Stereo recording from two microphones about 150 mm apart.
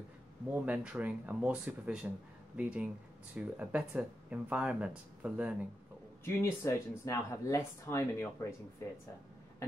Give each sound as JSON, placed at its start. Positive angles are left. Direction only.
{"t": 0.5, "sound": "speech", "side_deg": -10}
{"t": 6.2, "sound": "speech", "side_deg": 20}